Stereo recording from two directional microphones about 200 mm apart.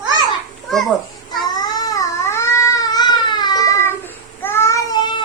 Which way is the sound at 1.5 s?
20° left (ahead or behind).